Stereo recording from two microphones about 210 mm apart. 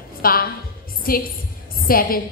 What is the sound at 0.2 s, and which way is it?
Speech, 45° left (ahead or behind).